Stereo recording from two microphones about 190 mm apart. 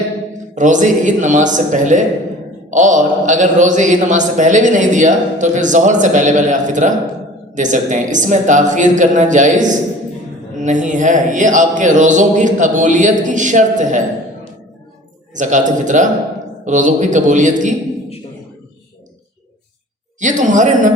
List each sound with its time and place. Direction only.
0.5 s a man's voice: 40° right (ahead or behind)
15.4 s a man's voice: 40° right (ahead or behind)
20.1 s a man's voice: 40° right (ahead or behind)